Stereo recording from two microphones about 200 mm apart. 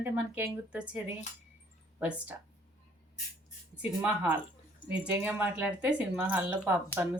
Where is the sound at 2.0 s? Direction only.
5° right (ahead or behind).